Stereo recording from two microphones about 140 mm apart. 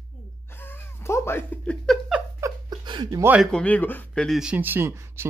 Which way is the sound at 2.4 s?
30° right (ahead or behind).